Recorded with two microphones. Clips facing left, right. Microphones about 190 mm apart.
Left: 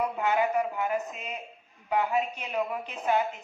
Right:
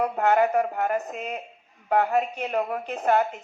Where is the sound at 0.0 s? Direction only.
55° right (ahead or behind).